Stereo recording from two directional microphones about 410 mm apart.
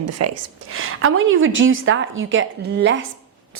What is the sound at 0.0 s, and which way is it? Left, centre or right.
A woman's voice, right.